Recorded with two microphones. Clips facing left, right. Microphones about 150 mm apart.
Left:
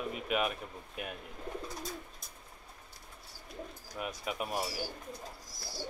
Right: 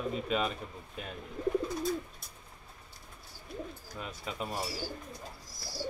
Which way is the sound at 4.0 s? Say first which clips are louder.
Left 2 dB; 10° left (ahead or behind).